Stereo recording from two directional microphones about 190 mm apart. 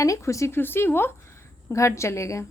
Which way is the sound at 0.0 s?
15° left (ahead or behind).